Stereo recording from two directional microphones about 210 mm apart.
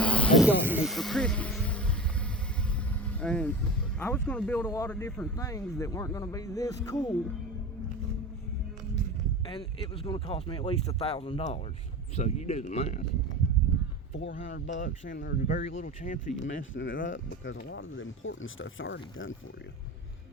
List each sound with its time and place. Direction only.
0.0 s a sound: 5° left (ahead or behind)
0.4 s a sound: 5° right (ahead or behind)
3.0 s vehicle: 5° left (ahead or behind)
4.0 s speech: 5° left (ahead or behind)
9.5 s speech: 25° left (ahead or behind)
14.2 s speech: 60° left (ahead or behind)
15.2 s speech: 45° left (ahead or behind)
16.5 s speech: 60° left (ahead or behind)